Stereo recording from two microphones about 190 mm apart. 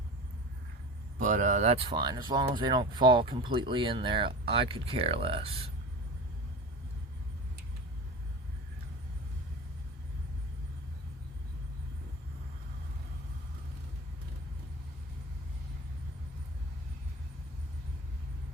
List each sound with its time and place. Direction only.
1.2 s speech: 40° right (ahead or behind)